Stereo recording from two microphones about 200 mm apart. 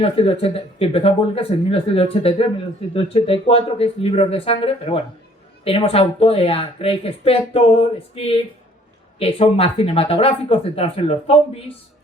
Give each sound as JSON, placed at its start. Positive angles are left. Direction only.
{"t": 0.0, "sound": "a woman's voice", "side_deg": 30}